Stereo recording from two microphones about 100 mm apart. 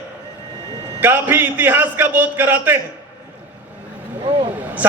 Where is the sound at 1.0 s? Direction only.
20° right (ahead or behind).